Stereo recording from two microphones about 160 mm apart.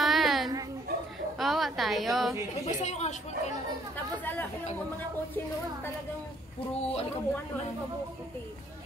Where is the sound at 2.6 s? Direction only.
45° left (ahead or behind).